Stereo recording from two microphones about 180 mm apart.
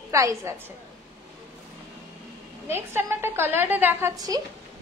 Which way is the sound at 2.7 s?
15° right (ahead or behind).